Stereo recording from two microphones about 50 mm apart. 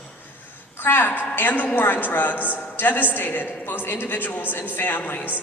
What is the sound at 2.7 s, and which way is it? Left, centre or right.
A woman's voice, left.